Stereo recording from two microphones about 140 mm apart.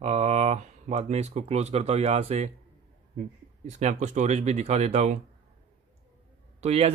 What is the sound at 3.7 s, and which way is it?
Speech, 55° right (ahead or behind).